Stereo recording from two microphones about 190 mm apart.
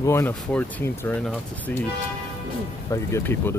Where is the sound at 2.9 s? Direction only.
15° left (ahead or behind).